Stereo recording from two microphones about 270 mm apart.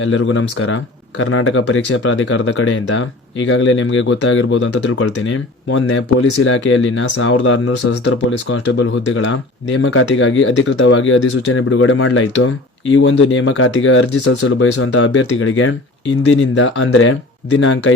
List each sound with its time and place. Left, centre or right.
0.0 s speech: left